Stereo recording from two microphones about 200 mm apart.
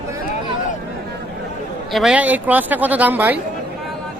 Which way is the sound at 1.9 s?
5° right (ahead or behind).